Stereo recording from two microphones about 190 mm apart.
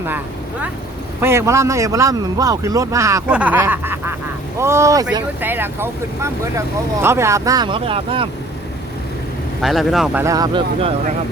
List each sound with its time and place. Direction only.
1.2 s speech: 15° right (ahead or behind)
3.2 s snicker: 5° right (ahead or behind)
4.5 s speech: 15° right (ahead or behind)
9.6 s speech: centre (ahead or behind)
10.2 s speech: 20° right (ahead or behind)